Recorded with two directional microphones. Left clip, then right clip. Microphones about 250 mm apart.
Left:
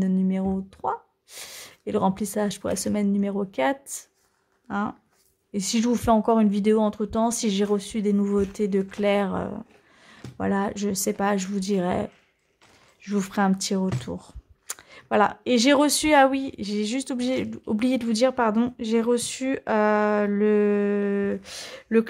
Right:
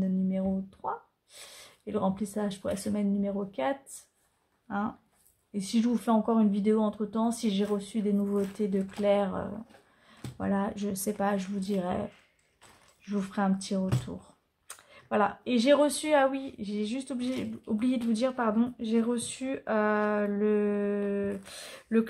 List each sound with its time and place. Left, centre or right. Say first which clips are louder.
0.0 s speech: left 5 dB; left